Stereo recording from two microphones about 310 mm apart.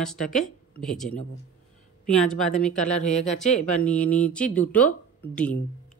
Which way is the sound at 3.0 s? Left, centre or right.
Left.